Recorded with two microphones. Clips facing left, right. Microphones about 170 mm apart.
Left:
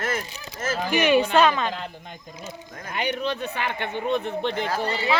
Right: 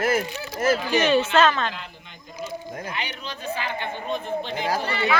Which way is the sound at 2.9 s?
50° left (ahead or behind).